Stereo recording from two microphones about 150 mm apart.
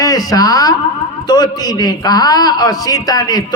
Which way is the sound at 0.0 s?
25° left (ahead or behind).